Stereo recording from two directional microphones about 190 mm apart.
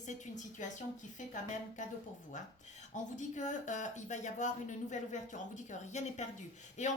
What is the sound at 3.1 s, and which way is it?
Speech, 40° left (ahead or behind).